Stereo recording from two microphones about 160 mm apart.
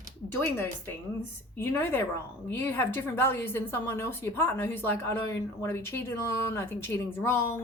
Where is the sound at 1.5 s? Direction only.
15° left (ahead or behind).